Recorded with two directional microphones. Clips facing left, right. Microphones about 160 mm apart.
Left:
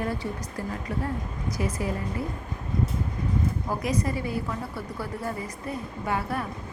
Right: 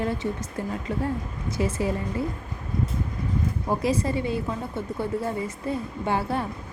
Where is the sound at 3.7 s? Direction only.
30° right (ahead or behind).